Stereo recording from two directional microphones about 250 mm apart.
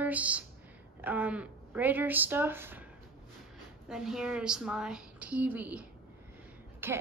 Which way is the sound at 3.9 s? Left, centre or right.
Centre.